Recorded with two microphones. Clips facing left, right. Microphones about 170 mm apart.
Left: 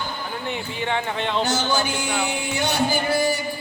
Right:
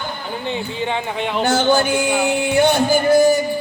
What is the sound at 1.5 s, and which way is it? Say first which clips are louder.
Speech: right 7 dB; 60° right (ahead or behind).